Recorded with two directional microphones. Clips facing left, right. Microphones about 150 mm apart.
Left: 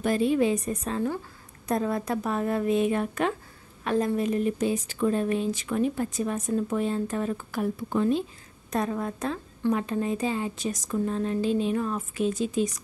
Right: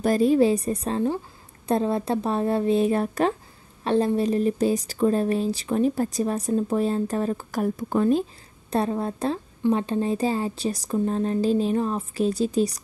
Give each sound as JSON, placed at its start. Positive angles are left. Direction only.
{"t": 0.0, "sound": "a woman's voice", "side_deg": -40}
{"t": 8.6, "sound": "speech", "side_deg": -30}